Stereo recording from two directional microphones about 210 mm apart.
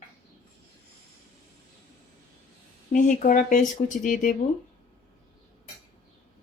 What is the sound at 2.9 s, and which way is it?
Speech, 40° left (ahead or behind).